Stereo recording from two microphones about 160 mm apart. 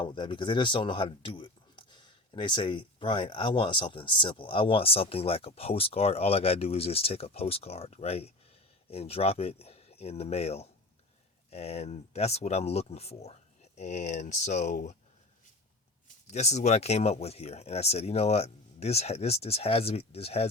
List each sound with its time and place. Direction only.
0.0 s speech: 30° left (ahead or behind); by 14.8 s 50° left (ahead or behind)
16.3 s speech: 45° left (ahead or behind)